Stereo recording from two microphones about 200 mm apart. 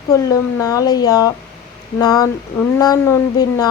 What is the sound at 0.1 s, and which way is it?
Speech, 15° left (ahead or behind).